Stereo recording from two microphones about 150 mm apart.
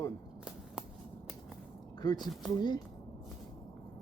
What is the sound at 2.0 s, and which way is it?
Speech, 30° left (ahead or behind).